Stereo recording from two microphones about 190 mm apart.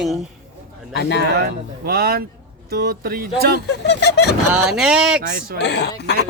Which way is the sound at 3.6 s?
60° left (ahead or behind).